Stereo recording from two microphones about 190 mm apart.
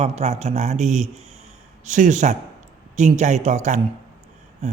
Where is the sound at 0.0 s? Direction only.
35° right (ahead or behind).